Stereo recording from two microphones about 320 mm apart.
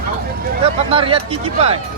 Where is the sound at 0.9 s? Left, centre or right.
Centre.